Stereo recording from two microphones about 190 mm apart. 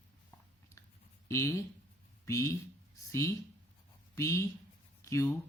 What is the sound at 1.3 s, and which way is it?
Speech, 15° left (ahead or behind).